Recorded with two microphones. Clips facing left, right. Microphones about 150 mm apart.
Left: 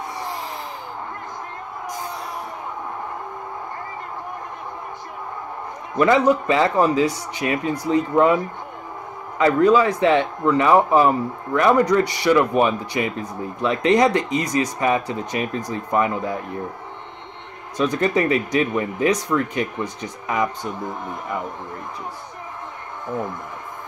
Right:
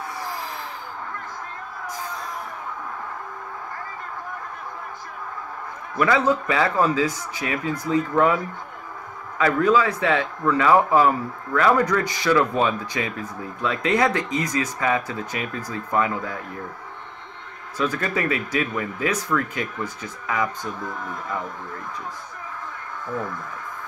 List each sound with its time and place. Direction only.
5.9 s a man's voice: 20° left (ahead or behind)
9.4 s a man's voice: 20° left (ahead or behind)
17.7 s a man's voice: 20° left (ahead or behind)